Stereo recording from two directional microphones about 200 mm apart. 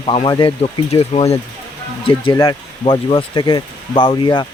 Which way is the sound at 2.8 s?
25° left (ahead or behind).